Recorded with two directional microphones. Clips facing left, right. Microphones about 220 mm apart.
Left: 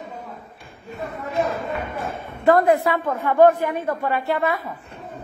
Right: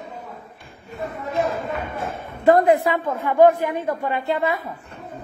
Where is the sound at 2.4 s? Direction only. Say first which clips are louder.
Right 1 dB; 20° right (ahead or behind).